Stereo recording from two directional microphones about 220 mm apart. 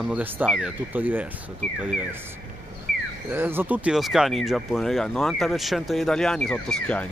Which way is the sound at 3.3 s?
10° right (ahead or behind).